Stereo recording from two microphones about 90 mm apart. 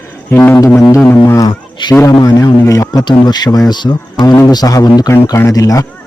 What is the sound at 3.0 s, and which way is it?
A man's voice, 55° left (ahead or behind).